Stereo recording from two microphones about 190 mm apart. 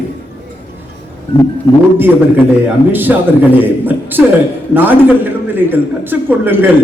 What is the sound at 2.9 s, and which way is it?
A man's voice, 10° right (ahead or behind).